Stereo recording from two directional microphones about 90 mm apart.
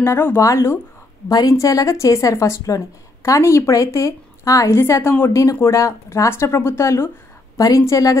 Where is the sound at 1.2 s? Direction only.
45° left (ahead or behind).